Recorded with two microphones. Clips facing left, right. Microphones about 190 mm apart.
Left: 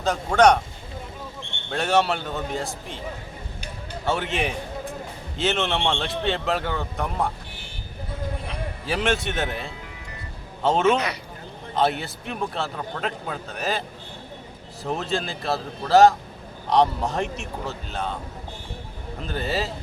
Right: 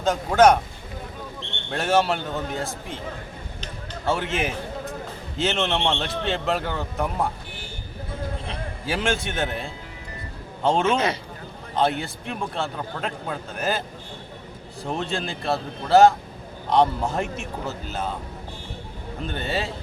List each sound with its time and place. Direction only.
0.0 s a man's voice: centre (ahead or behind)
1.7 s a man's voice: centre (ahead or behind)
4.0 s a man's voice: centre (ahead or behind)
8.9 s a man's voice: centre (ahead or behind)
10.9 s a man's voice: 25° right (ahead or behind)
11.7 s a man's voice: centre (ahead or behind)
14.8 s a man's voice: centre (ahead or behind)
19.2 s a man's voice: centre (ahead or behind)